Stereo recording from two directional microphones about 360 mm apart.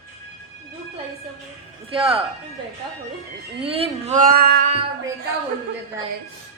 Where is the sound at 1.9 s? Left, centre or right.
Centre.